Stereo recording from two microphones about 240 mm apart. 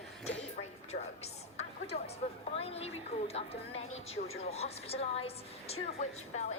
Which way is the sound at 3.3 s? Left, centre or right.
Left.